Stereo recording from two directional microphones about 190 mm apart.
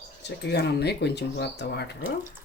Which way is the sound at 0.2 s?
65° left (ahead or behind).